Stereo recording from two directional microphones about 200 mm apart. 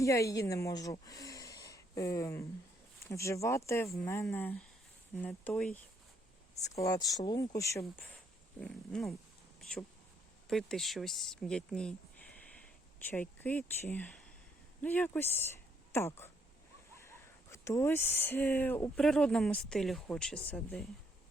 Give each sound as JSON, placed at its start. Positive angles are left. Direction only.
{"t": 0.0, "sound": "speech", "side_deg": 15}
{"t": 6.6, "sound": "speech", "side_deg": 20}
{"t": 8.6, "sound": "dog", "side_deg": 5}
{"t": 9.6, "sound": "a sound", "side_deg": 5}
{"t": 10.5, "sound": "speech", "side_deg": 0}